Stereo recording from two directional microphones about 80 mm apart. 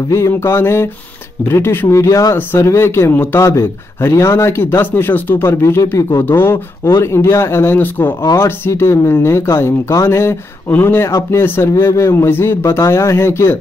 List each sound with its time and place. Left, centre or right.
0.1 s speech: left
2.6 s speech: left
3.4 s speech: left
8.2 s speech: left
12.3 s speech: left